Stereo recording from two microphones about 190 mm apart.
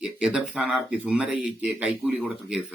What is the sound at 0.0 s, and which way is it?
A man's voice, 5° right (ahead or behind).